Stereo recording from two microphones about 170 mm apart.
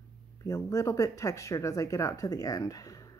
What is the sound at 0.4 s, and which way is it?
Speech, 20° left (ahead or behind).